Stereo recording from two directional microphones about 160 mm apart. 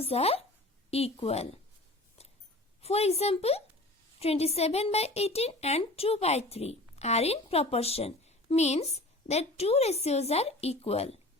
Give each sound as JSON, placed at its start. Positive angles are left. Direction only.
{"t": 0.0, "sound": "a woman's voice", "side_deg": 40}
{"t": 2.8, "sound": "a woman's voice", "side_deg": 40}